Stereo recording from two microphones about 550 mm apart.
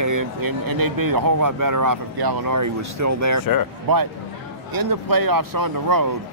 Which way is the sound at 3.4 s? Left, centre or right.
Left.